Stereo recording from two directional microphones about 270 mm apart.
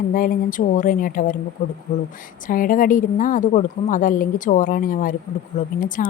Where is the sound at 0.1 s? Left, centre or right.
Left.